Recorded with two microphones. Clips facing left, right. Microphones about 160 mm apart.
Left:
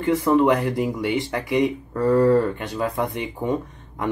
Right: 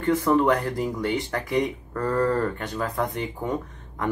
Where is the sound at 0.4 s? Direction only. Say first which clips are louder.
Left 3 dB; 20° left (ahead or behind).